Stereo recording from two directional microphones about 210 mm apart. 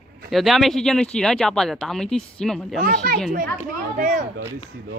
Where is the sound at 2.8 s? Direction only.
45° right (ahead or behind).